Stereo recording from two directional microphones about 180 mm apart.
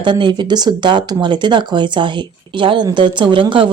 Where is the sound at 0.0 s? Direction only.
25° right (ahead or behind).